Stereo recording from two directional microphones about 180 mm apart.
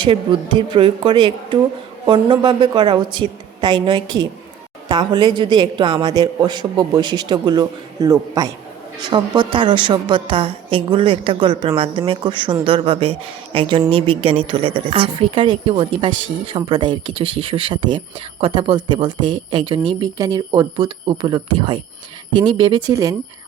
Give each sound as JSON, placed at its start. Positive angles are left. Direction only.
{"t": 0.0, "sound": "speech", "side_deg": -25}